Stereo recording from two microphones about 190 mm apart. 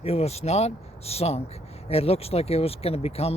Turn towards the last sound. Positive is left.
turn(degrees=30)  # may be behind; listen again after turning